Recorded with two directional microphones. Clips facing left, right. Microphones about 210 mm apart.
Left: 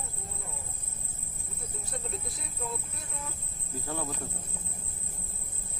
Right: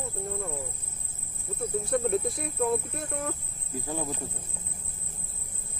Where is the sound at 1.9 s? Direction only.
60° right (ahead or behind).